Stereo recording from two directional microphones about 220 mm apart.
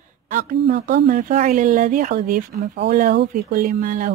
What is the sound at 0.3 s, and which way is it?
Speech, 35° right (ahead or behind).